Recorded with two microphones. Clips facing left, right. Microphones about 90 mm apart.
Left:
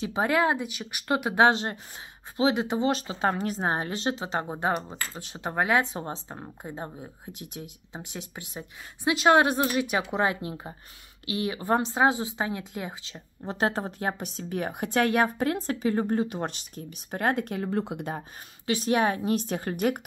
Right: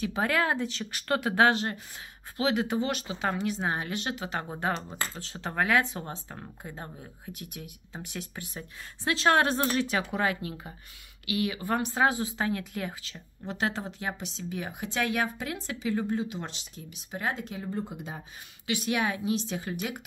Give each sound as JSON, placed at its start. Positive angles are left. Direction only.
{"t": 0.0, "sound": "speech", "side_deg": 20}
{"t": 18.7, "sound": "speech", "side_deg": 35}